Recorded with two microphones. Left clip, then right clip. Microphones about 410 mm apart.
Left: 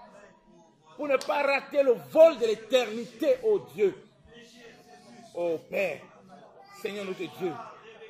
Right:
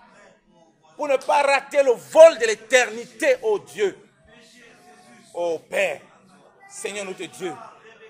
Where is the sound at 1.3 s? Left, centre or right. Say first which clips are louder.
Right 8 dB; right.